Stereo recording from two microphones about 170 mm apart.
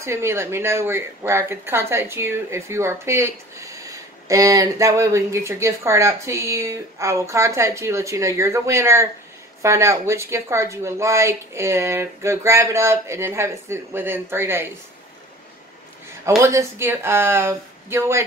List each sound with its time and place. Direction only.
0.0 s a woman's voice: 15° right (ahead or behind)
16.3 s a woman's voice: 15° right (ahead or behind)